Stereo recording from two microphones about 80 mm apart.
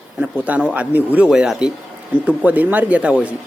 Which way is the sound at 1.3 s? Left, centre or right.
Centre.